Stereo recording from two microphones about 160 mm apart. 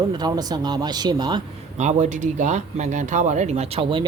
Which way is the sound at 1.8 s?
45° right (ahead or behind).